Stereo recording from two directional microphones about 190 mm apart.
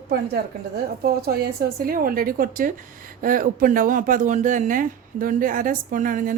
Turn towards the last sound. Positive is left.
turn(degrees=-45)  # may be behind; listen again after turning